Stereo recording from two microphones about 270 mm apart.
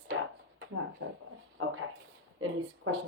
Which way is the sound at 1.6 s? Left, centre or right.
Right.